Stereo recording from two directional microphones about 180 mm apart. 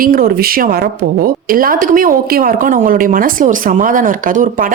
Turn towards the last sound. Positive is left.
turn(degrees=-50)  # may be behind; listen again after turning